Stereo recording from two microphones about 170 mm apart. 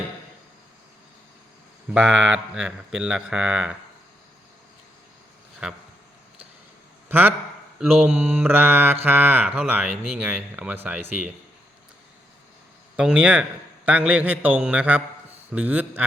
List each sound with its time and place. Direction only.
1.9 s speech: 5° right (ahead or behind)
7.1 s speech: 10° right (ahead or behind)
13.0 s speech: 5° right (ahead or behind)